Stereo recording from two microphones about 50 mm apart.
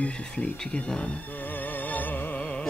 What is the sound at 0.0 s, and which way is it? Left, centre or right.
Speech, centre.